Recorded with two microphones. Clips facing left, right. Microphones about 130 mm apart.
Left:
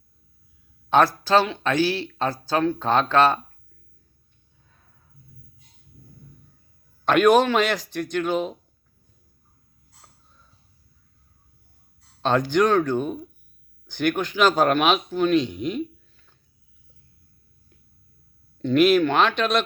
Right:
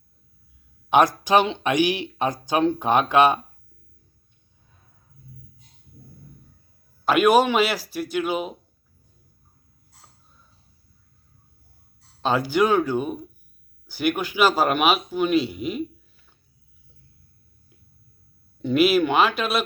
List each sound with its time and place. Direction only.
0.9 s speech: 15° right (ahead or behind)
7.0 s speech: 5° right (ahead or behind)
12.2 s speech: 5° right (ahead or behind)
18.6 s speech: 5° right (ahead or behind)